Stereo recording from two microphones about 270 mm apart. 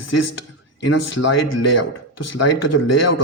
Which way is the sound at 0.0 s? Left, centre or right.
Left.